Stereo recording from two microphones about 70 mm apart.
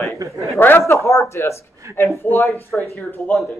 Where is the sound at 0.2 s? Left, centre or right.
Right.